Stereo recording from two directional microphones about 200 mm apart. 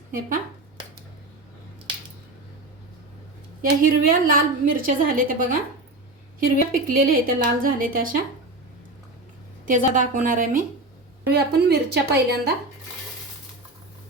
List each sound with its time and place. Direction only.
3.6 s a woman's voice: 45° right (ahead or behind)
9.6 s a woman's voice: 40° right (ahead or behind)
11.3 s a woman's voice: 55° right (ahead or behind)